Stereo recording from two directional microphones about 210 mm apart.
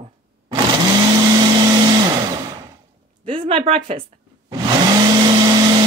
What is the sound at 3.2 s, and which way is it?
Speech, 25° right (ahead or behind).